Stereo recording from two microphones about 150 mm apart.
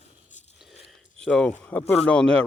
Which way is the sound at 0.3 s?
55° left (ahead or behind).